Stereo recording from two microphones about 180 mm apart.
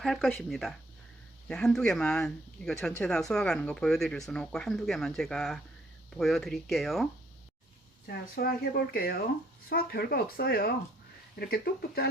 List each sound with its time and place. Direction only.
0.0 s speech: centre (ahead or behind)
8.0 s speech: 60° left (ahead or behind)